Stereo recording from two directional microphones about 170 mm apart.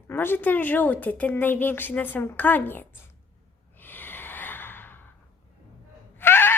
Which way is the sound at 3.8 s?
10° left (ahead or behind).